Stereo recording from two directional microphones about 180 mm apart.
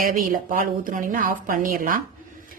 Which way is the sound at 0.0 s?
50° right (ahead or behind).